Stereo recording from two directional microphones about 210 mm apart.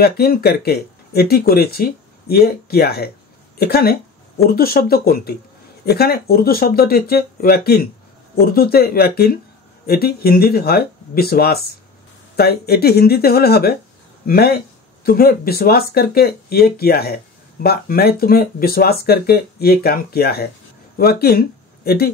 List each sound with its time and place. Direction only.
0.0 s speech: 45° left (ahead or behind)